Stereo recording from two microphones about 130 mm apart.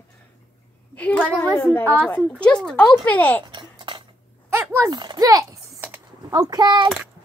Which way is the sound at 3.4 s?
35° right (ahead or behind).